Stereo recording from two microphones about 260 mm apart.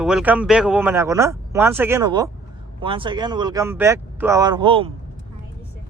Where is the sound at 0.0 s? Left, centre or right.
Centre.